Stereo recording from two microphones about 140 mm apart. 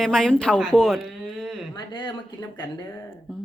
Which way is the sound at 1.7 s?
35° left (ahead or behind).